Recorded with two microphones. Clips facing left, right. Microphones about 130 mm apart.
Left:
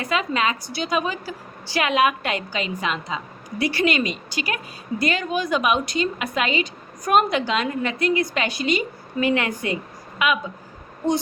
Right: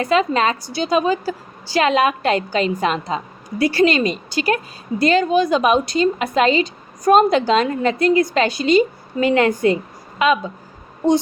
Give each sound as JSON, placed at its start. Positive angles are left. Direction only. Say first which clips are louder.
{"t": 0.0, "sound": "a woman's voice", "louder": "right 6 dB", "side_deg": -35}